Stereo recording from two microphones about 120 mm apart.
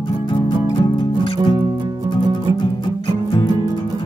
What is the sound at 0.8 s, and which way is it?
Music, 35° left (ahead or behind).